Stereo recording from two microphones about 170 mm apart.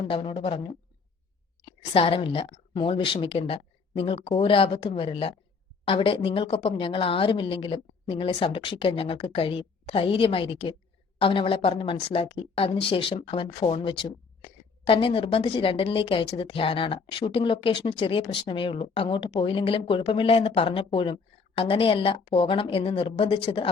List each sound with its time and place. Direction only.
0.0 s speech: 30° left (ahead or behind)
1.6 s speech: 30° left (ahead or behind)